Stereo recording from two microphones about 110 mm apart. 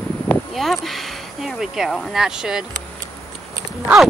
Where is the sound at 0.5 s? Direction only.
Centre (ahead or behind).